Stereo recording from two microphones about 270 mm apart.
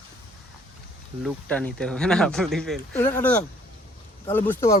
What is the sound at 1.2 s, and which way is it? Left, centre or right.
Speech, centre.